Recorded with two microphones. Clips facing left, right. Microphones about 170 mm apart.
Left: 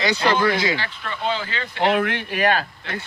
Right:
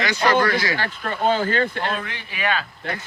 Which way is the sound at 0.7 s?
45° right (ahead or behind).